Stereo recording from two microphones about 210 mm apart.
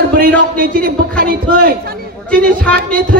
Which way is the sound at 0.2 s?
45° right (ahead or behind).